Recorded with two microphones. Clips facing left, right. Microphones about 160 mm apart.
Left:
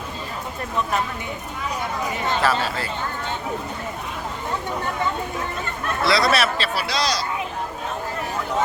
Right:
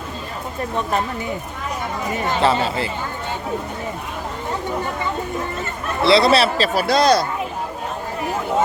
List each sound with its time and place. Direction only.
2.4 s speech: 25° right (ahead or behind)
6.0 s speech: 25° right (ahead or behind)
6.7 s speech: 50° right (ahead or behind)